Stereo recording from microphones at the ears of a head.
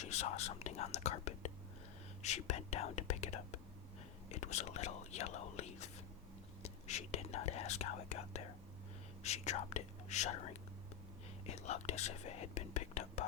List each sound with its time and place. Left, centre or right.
0.0 s speech: left